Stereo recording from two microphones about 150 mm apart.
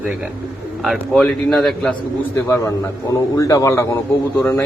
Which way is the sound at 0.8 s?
Centre (ahead or behind).